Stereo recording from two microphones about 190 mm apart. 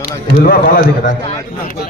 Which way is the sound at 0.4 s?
50° left (ahead or behind).